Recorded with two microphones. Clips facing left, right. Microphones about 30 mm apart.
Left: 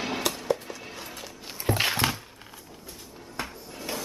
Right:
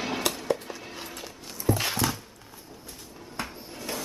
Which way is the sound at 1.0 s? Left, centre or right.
Centre.